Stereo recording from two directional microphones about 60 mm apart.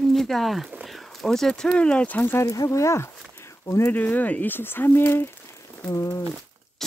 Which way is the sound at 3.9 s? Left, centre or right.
Left.